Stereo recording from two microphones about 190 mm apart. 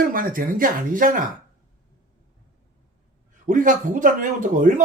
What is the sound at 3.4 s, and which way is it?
Speech, 45° right (ahead or behind).